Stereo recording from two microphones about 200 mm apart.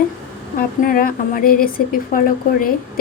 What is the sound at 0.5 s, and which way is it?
A woman's voice, 45° left (ahead or behind).